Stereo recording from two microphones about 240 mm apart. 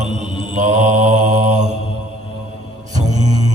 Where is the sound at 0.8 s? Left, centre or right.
Right.